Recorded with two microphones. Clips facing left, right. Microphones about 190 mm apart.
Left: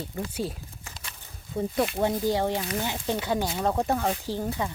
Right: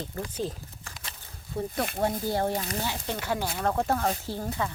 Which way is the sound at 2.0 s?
20° left (ahead or behind).